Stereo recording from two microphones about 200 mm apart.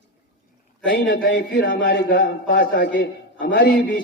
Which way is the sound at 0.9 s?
60° left (ahead or behind).